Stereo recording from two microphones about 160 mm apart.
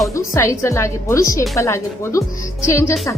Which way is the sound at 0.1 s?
15° left (ahead or behind).